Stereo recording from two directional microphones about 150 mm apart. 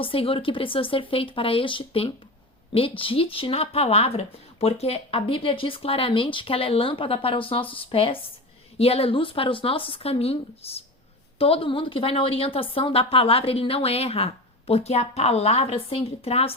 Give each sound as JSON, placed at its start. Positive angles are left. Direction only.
{"t": 0.0, "sound": "speech", "side_deg": 35}